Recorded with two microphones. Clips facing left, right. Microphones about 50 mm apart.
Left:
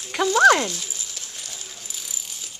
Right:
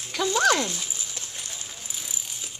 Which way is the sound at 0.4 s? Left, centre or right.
Left.